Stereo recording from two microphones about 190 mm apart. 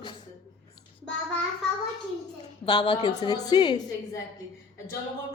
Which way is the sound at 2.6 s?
25° left (ahead or behind).